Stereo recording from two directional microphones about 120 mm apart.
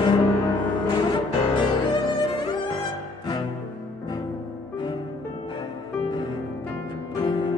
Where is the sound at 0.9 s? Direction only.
40° left (ahead or behind).